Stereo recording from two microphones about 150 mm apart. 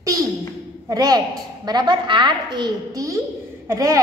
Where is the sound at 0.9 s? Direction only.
25° right (ahead or behind).